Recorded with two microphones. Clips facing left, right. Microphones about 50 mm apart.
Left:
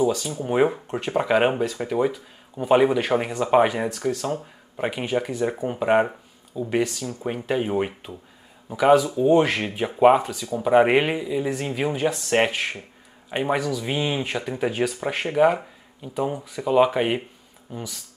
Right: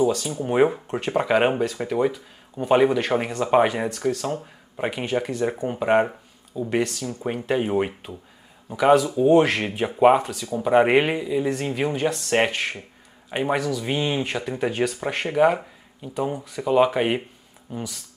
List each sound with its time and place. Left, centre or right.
0.0 s speech: centre
7.2 s speech: centre